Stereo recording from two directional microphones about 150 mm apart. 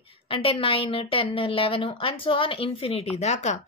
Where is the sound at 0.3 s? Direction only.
35° left (ahead or behind).